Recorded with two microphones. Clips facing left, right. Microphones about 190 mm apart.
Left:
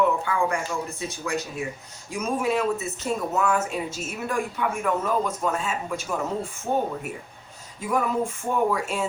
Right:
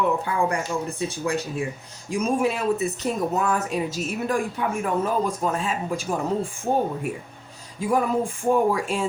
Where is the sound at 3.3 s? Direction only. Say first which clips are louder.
Even; 35° right (ahead or behind).